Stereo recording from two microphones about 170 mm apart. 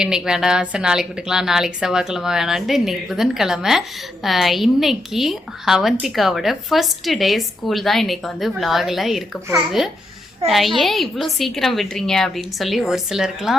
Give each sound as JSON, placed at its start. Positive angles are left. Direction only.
{"t": 0.0, "sound": "a woman's voice", "side_deg": -5}